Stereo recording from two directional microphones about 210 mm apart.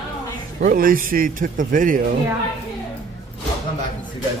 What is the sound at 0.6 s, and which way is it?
Speech, 40° right (ahead or behind).